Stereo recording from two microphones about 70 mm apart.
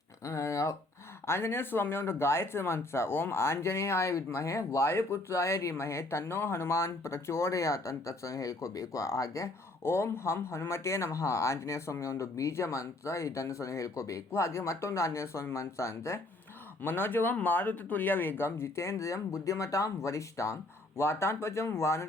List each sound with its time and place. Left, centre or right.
0.3 s a sound: left
1.3 s speech: left
9.8 s speech: left
16.8 s speech: left